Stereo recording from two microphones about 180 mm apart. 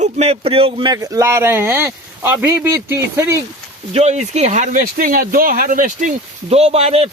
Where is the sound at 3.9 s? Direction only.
35° right (ahead or behind).